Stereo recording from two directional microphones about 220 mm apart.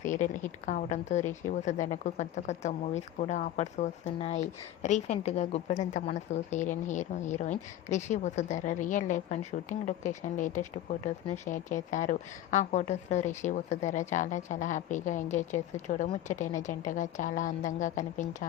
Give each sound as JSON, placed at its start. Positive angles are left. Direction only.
{"t": 0.0, "sound": "a woman's voice", "side_deg": 35}